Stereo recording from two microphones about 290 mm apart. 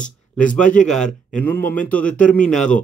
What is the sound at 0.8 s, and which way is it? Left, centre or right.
A man's voice, centre.